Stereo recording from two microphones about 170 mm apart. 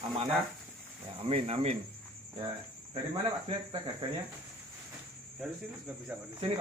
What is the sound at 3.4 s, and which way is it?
Speech, 30° right (ahead or behind).